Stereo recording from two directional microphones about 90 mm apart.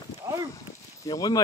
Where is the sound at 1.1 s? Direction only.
45° left (ahead or behind).